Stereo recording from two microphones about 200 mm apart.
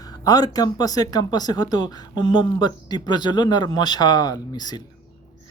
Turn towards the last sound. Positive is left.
turn(degrees=20)  # may be behind; listen again after turning